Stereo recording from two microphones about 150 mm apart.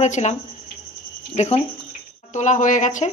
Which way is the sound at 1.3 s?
45° left (ahead or behind).